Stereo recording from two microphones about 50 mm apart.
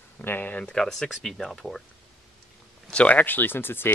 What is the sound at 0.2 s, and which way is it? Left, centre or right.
Speech, left.